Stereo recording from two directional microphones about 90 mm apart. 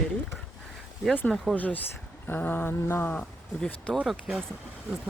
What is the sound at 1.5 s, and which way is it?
Speech, 20° left (ahead or behind).